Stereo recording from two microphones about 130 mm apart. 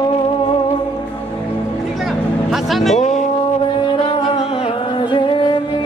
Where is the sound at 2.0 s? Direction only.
Centre (ahead or behind).